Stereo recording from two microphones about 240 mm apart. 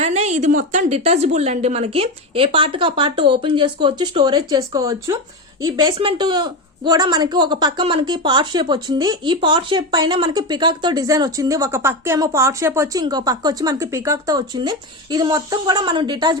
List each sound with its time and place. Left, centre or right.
0.0 s speech: right